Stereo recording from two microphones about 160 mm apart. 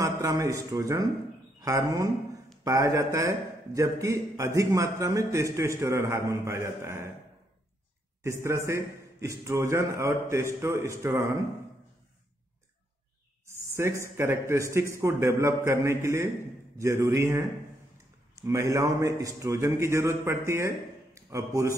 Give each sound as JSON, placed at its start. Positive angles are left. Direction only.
{"t": 0.0, "sound": "a man's voice", "side_deg": -20}
{"t": 8.2, "sound": "a man's voice", "side_deg": -15}
{"t": 13.5, "sound": "a sound", "side_deg": -15}
{"t": 14.1, "sound": "a man's voice", "side_deg": -15}